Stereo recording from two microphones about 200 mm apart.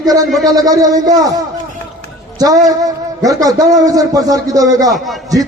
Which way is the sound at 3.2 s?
15° right (ahead or behind).